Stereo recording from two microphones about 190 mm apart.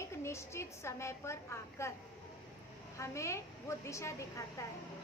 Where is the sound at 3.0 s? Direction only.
15° left (ahead or behind).